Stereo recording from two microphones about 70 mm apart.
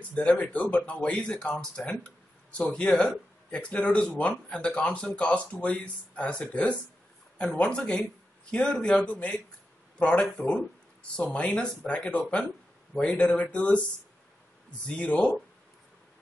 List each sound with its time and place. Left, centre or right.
0.1 s speech: centre
15.0 s speech: centre